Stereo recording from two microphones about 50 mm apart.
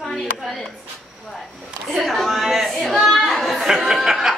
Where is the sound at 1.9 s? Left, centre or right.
Centre.